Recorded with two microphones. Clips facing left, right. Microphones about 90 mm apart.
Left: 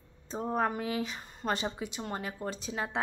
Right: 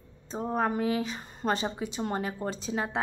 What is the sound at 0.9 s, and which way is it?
A woman's voice, 25° right (ahead or behind).